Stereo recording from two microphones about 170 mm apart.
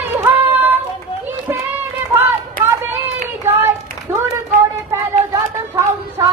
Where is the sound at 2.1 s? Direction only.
15° right (ahead or behind).